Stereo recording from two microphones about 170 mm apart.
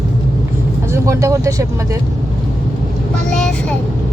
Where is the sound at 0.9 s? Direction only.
15° right (ahead or behind).